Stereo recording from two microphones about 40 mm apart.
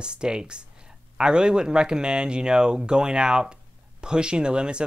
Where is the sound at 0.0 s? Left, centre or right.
Right.